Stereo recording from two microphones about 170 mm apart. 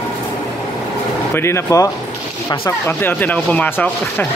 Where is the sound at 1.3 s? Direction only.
15° left (ahead or behind).